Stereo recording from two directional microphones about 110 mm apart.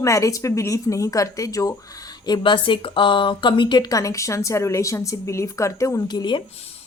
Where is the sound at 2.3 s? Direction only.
50° left (ahead or behind).